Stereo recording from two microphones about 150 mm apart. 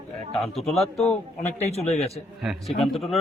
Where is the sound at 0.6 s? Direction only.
Centre (ahead or behind).